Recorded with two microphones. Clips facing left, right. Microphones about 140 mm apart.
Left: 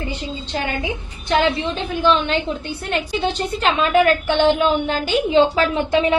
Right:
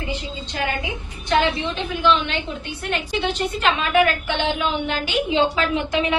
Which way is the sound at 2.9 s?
35° left (ahead or behind).